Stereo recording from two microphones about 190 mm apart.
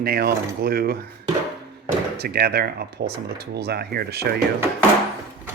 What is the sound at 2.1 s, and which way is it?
Speech, 55° right (ahead or behind).